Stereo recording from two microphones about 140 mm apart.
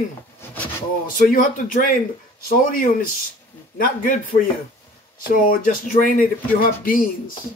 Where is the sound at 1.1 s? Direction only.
75° left (ahead or behind).